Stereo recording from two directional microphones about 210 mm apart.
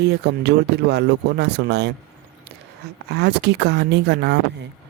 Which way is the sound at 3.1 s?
50° right (ahead or behind).